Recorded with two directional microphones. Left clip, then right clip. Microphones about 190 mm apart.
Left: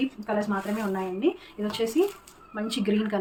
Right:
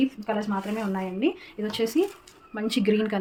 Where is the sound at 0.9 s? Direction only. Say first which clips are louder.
Even; 40° right (ahead or behind).